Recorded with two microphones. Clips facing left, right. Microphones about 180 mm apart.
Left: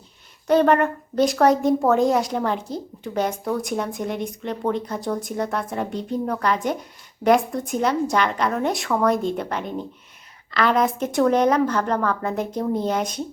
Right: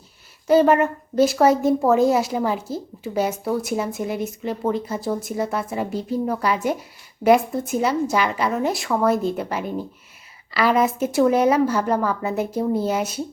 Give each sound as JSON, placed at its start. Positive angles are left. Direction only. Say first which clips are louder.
{"t": 0.4, "sound": "a woman's voice", "louder": "right 1 dB", "side_deg": -5}